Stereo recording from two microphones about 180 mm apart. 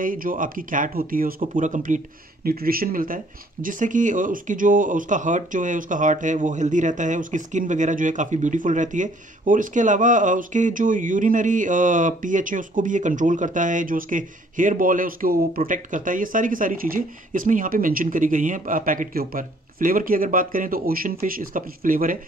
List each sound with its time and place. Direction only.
0.0 s speech: 50° right (ahead or behind)
2.4 s speech: 55° right (ahead or behind)